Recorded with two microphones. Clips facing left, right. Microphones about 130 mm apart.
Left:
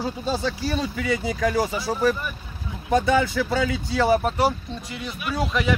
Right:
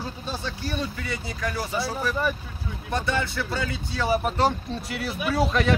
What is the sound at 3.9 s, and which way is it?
Speech, 90° left.